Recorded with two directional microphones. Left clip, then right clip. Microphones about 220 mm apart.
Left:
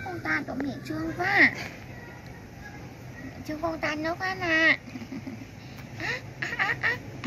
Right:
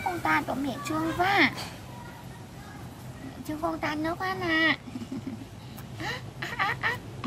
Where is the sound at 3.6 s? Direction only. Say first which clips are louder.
Left 1 dB; 15° right (ahead or behind).